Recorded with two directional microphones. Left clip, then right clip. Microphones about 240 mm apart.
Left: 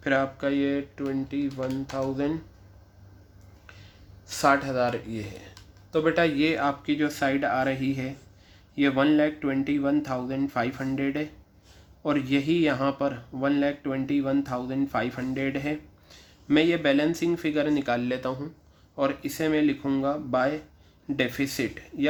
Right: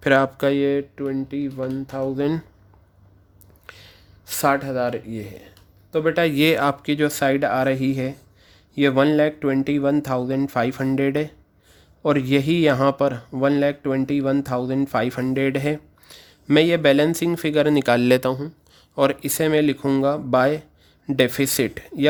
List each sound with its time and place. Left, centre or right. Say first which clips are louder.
0.0 s speech: right 8 dB; right
3.7 s a sound: right 8 dB; right
4.4 s speech: right 2 dB; right
18.9 s speech: right 7 dB; right